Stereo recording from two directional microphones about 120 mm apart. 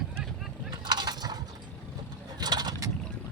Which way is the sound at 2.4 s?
35° right (ahead or behind).